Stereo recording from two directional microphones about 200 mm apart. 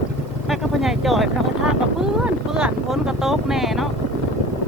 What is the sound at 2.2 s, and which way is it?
Speech, 5° right (ahead or behind).